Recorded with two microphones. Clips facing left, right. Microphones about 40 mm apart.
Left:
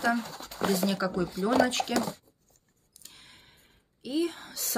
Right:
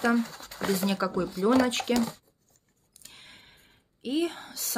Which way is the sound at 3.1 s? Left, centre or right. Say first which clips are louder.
Right 4 dB; right.